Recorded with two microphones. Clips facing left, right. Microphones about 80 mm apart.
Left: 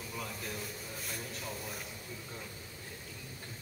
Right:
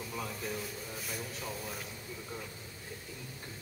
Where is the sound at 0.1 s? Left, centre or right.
Centre.